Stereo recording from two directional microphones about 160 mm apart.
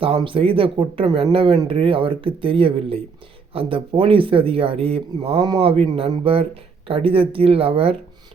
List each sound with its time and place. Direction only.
0.2 s speech: 35° right (ahead or behind)